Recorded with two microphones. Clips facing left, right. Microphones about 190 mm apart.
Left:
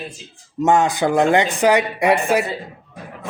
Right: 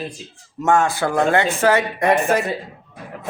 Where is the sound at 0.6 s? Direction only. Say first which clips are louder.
Left 2 dB; 20° left (ahead or behind).